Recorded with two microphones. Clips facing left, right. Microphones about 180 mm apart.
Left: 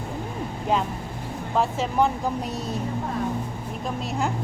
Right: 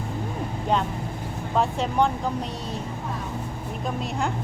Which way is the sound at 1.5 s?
Centre (ahead or behind).